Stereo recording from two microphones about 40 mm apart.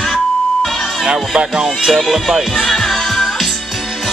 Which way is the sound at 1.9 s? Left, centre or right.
Centre.